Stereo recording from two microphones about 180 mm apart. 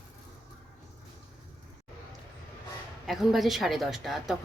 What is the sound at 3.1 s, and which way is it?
A woman's voice, centre (ahead or behind).